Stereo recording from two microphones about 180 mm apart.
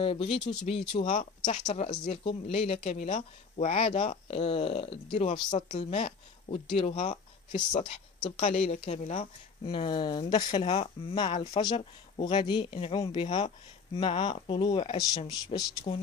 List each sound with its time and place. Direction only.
0.0 s speech: 30° left (ahead or behind)
5.8 s speech: 40° left (ahead or behind)
6.0 s speech: 30° left (ahead or behind)
7.1 s speech: 45° left (ahead or behind)
7.8 s speech: 35° left (ahead or behind)
9.7 s speech: 25° left (ahead or behind)